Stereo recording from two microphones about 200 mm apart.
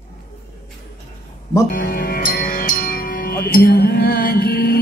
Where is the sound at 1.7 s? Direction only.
50° left (ahead or behind).